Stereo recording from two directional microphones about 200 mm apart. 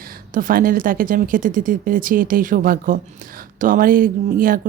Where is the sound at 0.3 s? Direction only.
45° right (ahead or behind).